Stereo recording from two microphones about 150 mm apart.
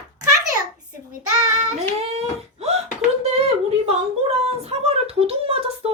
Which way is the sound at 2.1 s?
45° right (ahead or behind).